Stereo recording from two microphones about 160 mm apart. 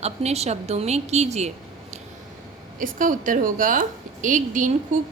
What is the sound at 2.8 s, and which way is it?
A woman's voice, 55° right (ahead or behind).